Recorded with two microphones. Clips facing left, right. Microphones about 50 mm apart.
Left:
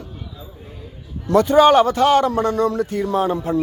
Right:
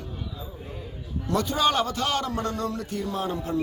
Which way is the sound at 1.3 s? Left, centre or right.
Left.